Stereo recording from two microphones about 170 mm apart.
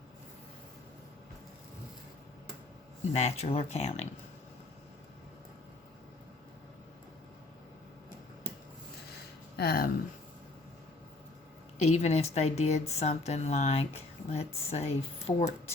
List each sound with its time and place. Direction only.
3.1 s speech: 40° left (ahead or behind)
9.6 s speech: 60° left (ahead or behind)
11.8 s speech: 40° left (ahead or behind)